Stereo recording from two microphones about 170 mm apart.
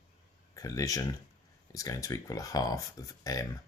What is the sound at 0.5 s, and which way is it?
Speech, 20° left (ahead or behind).